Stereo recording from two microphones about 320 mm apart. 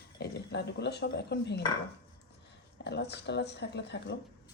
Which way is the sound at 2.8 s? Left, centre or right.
Left.